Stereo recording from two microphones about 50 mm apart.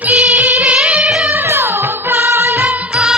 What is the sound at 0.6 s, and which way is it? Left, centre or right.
Music, right.